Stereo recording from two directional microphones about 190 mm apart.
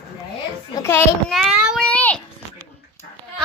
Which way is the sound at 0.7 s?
15° left (ahead or behind).